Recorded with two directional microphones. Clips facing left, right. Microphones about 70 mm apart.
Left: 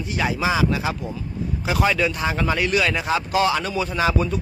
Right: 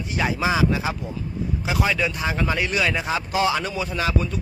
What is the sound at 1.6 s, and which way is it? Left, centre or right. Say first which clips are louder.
Speech: left 3 dB; centre.